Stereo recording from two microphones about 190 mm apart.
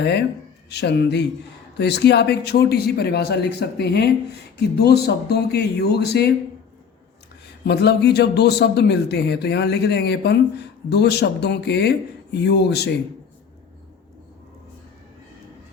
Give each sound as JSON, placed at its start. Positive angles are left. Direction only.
{"t": 0.0, "sound": "speech", "side_deg": 60}
{"t": 7.6, "sound": "speech", "side_deg": 60}